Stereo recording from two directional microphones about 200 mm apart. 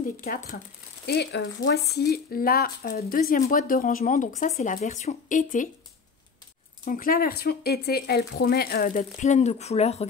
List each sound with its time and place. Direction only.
0.2 s speech: 45° left (ahead or behind)
1.0 s speech: 55° left (ahead or behind); by 5.7 s 40° left (ahead or behind)
6.8 s speech: 45° left (ahead or behind)